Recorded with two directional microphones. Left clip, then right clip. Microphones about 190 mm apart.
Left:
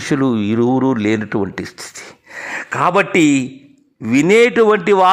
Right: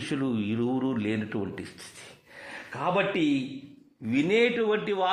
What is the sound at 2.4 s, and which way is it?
A man's voice, 50° left (ahead or behind).